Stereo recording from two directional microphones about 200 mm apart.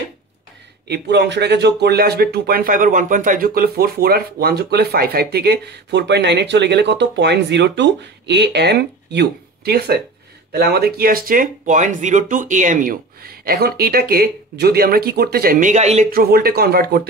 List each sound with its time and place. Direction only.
0.8 s speech: 55° right (ahead or behind); by 16.1 s 35° right (ahead or behind)
16.1 s speech: 50° right (ahead or behind)